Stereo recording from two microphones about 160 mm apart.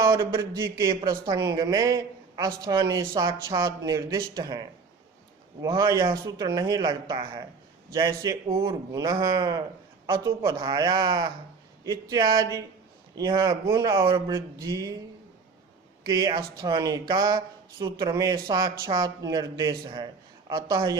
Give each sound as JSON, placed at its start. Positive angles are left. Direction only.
{"t": 0.0, "sound": "speech", "side_deg": -20}
{"t": 8.5, "sound": "speech", "side_deg": -20}
{"t": 16.0, "sound": "speech", "side_deg": -25}